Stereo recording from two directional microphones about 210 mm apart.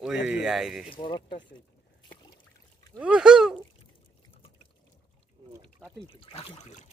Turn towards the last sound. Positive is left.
turn(degrees=35)  # may be behind; listen again after turning